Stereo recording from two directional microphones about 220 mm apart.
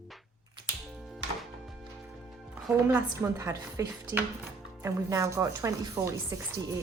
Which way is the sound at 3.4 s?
15° right (ahead or behind).